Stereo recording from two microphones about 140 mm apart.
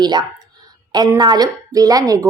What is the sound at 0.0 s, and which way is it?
A woman's voice, 30° right (ahead or behind).